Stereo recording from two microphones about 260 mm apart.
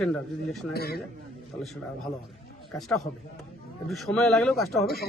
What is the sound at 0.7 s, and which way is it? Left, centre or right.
Speech, left.